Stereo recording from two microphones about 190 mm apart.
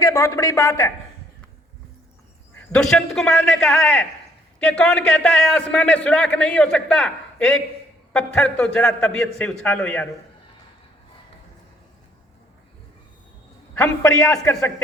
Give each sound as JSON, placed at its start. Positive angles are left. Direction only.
{"t": 0.0, "sound": "a man's voice", "side_deg": 20}
{"t": 2.6, "sound": "a man's voice", "side_deg": 5}
{"t": 13.7, "sound": "a man's voice", "side_deg": 5}